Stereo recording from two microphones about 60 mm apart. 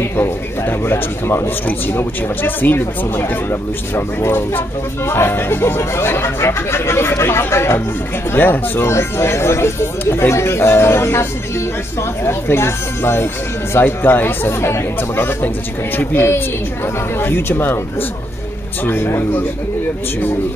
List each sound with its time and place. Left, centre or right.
0.0 s speech: left
8.3 s speech: left
12.3 s speech: left
18.9 s speech: left